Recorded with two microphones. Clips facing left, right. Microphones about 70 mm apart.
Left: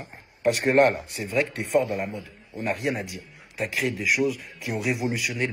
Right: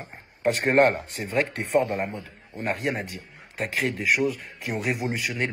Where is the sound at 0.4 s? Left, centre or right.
Right.